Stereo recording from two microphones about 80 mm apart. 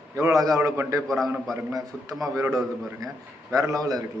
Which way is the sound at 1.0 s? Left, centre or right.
Centre.